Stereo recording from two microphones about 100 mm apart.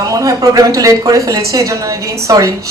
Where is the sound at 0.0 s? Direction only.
35° right (ahead or behind).